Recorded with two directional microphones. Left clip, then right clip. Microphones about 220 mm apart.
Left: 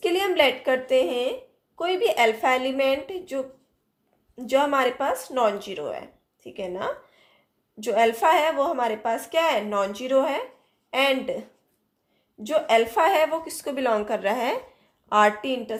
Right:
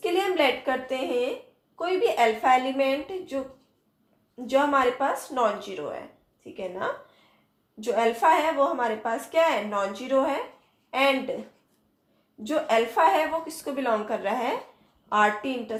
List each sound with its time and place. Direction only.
0.0 s a sound: 50° left (ahead or behind)
1.8 s speech: 50° left (ahead or behind)
4.4 s speech: 50° left (ahead or behind)
12.4 s speech: 50° left (ahead or behind)